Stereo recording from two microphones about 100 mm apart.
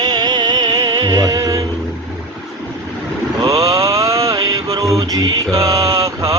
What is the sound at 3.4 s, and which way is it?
Mantra, 35° right (ahead or behind).